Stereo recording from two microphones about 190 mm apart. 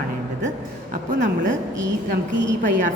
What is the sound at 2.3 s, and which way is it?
Speech, 80° right.